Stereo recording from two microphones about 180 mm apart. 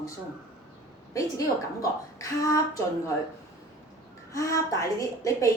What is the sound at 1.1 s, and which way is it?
A woman's voice, 15° left (ahead or behind).